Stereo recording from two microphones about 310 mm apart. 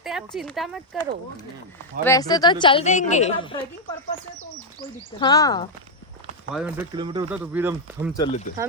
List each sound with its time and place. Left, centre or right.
0.0 s speech: centre
2.0 s a woman's voice: centre
4.8 s a woman's voice: centre
6.5 s speech: centre
8.1 s speech: centre